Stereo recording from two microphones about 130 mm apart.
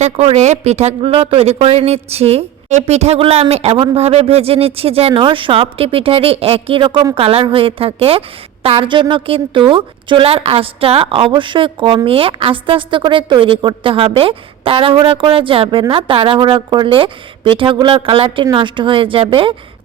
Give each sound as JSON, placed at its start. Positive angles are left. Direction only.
{"t": 0.0, "sound": "a woman's voice", "side_deg": -55}